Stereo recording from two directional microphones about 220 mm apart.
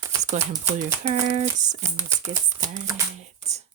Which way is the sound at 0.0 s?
15° right (ahead or behind).